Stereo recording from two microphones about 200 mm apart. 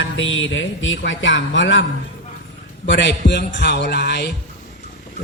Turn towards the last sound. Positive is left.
turn(degrees=55)  # may be behind; listen again after turning